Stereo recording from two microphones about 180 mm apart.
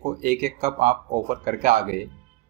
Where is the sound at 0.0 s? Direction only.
50° right (ahead or behind).